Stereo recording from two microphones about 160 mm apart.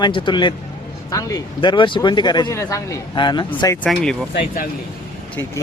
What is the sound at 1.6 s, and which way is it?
Speech, 30° left (ahead or behind).